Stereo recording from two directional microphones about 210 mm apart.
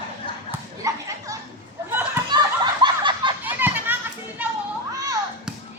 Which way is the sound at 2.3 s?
20° right (ahead or behind).